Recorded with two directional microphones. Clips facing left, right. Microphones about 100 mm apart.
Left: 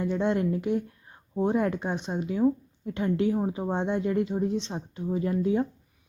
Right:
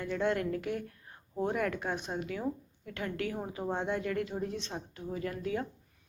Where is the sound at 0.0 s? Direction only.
20° left (ahead or behind).